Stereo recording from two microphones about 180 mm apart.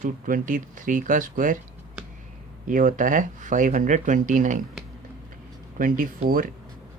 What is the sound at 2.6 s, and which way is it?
Speech, 50° right (ahead or behind).